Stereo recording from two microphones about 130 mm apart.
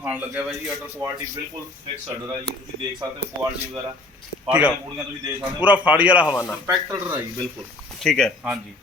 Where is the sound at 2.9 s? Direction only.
25° right (ahead or behind).